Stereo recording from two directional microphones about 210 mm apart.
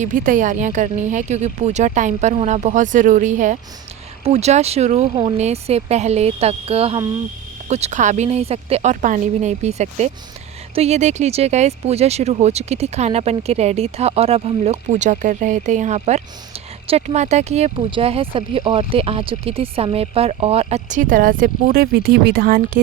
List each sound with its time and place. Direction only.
0.0 s speech: 40° right (ahead or behind)